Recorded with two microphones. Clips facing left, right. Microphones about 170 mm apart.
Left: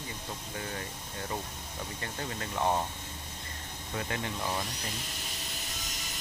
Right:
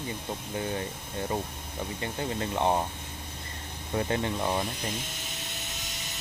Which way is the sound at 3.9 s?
30° right (ahead or behind).